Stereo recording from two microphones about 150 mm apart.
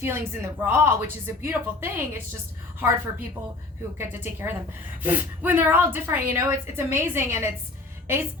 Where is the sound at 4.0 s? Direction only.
15° right (ahead or behind).